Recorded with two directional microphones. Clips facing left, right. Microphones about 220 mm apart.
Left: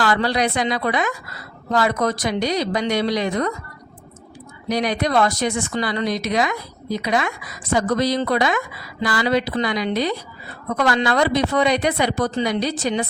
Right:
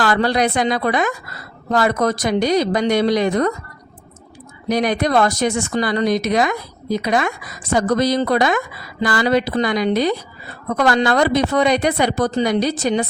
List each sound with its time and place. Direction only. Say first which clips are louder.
0.0 s speech: right 3 dB; 45° right (ahead or behind)
4.7 s speech: right 3 dB; 50° right (ahead or behind)